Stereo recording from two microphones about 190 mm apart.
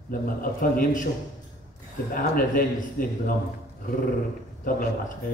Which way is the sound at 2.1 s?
50° left (ahead or behind).